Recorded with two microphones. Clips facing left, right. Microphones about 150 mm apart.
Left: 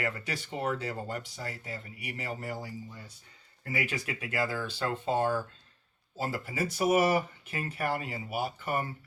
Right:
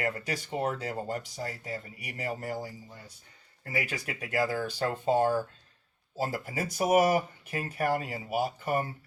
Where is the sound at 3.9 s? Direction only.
40° right (ahead or behind).